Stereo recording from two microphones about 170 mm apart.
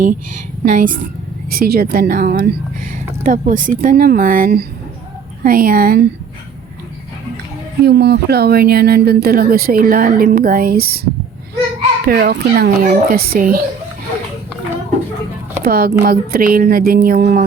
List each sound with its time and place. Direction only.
0.0 s speech: 50° right (ahead or behind)
3.2 s speech: 50° right (ahead or behind)
7.9 s speech: 75° right (ahead or behind)
12.0 s speech: 65° right (ahead or behind)
15.6 s speech: 60° right (ahead or behind)